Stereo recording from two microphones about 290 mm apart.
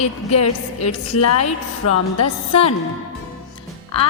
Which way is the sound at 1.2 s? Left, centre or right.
Left.